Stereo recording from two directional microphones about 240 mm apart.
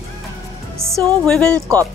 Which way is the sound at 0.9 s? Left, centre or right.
Centre.